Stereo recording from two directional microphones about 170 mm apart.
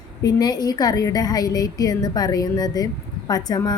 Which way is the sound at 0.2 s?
20° left (ahead or behind).